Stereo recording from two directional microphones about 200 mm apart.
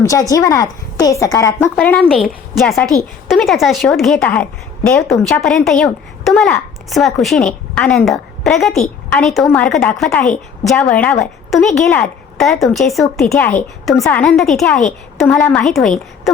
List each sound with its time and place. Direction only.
0.0 s a woman's voice: 15° left (ahead or behind); by 16.3 s centre (ahead or behind)